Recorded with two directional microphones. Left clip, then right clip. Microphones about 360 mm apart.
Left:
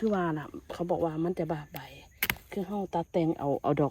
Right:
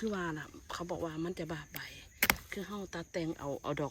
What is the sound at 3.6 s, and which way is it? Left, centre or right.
Speech, centre.